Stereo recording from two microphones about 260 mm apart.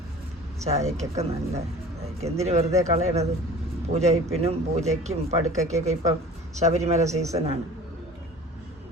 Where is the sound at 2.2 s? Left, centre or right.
Right.